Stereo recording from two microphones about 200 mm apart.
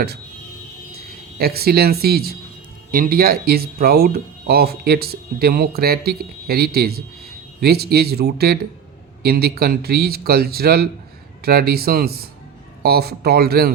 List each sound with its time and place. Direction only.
1.4 s speech: 50° right (ahead or behind)